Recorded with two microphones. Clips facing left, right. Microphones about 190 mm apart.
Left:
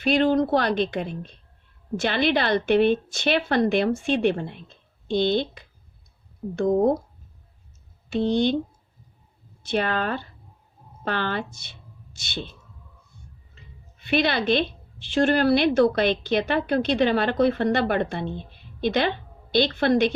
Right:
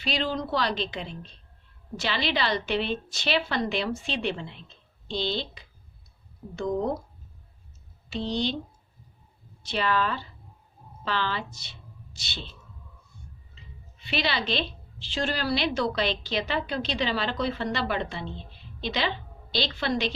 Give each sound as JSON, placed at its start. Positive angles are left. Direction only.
{"t": 0.0, "sound": "a woman's voice", "side_deg": 55}
{"t": 8.1, "sound": "a woman's voice", "side_deg": 50}
{"t": 9.6, "sound": "a woman's voice", "side_deg": 50}
{"t": 13.6, "sound": "a woman's voice", "side_deg": 55}